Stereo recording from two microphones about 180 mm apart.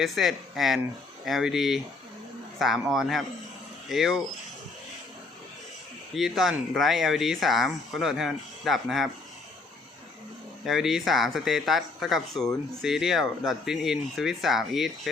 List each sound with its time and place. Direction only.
0.0 s speech: centre (ahead or behind)
6.1 s speech: centre (ahead or behind)
10.7 s speech: centre (ahead or behind)